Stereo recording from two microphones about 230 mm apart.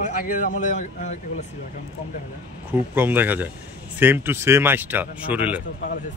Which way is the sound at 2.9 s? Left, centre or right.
Centre.